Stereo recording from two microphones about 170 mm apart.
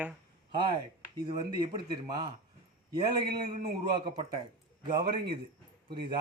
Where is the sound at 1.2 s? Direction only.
25° right (ahead or behind).